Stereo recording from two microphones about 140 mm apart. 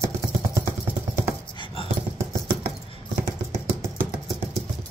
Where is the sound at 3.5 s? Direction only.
20° right (ahead or behind).